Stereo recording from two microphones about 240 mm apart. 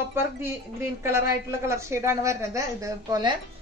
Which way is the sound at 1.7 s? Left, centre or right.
Centre.